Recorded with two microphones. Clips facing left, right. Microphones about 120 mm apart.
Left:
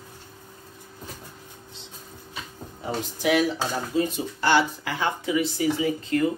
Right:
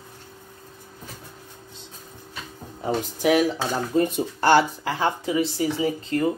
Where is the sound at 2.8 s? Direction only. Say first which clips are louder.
Right 4 dB; 45° right (ahead or behind).